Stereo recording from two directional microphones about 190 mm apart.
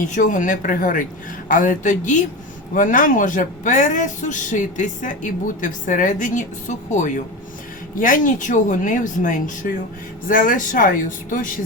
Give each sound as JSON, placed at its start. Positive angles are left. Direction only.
{"t": 0.2, "sound": "speech", "side_deg": 45}